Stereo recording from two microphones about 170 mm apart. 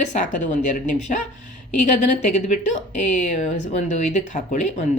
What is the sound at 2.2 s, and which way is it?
Speech, 45° left (ahead or behind).